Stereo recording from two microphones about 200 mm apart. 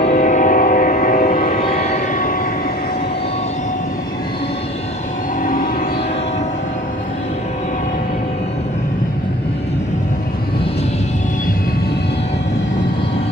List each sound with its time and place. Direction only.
0.1 s music: 35° left (ahead or behind)
1.7 s vehicle: 35° left (ahead or behind)
5.4 s music: 40° left (ahead or behind)